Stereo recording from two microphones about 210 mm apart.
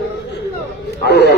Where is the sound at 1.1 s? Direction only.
55° left (ahead or behind).